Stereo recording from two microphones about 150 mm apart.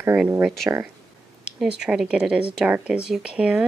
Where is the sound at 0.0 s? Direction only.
15° right (ahead or behind).